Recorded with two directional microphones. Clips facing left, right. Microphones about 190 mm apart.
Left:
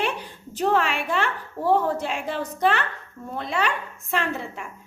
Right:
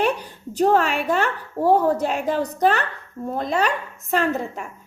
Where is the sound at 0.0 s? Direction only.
40° right (ahead or behind).